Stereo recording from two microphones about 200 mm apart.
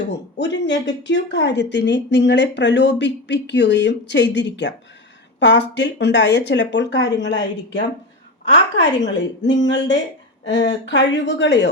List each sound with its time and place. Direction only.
0.1 s speech: 60° left (ahead or behind)